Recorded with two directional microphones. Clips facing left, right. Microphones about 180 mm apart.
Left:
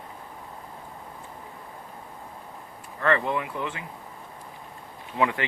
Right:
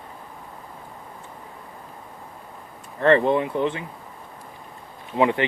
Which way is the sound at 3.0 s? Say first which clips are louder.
Right 7 dB; 30° right (ahead or behind).